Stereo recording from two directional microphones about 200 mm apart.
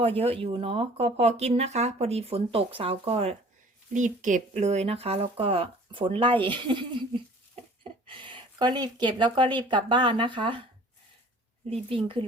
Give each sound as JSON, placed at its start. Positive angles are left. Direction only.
{"t": 0.0, "sound": "speech", "side_deg": -30}
{"t": 8.0, "sound": "speech", "side_deg": -25}
{"t": 11.7, "sound": "speech", "side_deg": -25}